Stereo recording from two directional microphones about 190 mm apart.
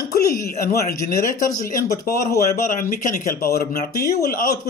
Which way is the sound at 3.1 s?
45° left (ahead or behind).